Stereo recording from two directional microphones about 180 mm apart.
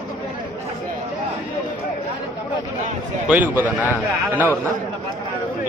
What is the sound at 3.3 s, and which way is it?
A man's voice, 10° right (ahead or behind).